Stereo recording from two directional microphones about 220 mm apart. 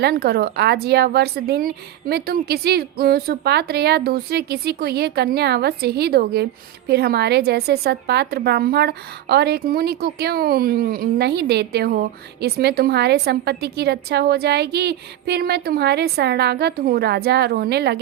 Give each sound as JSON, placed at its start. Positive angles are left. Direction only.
{"t": 0.0, "sound": "a woman's voice", "side_deg": -45}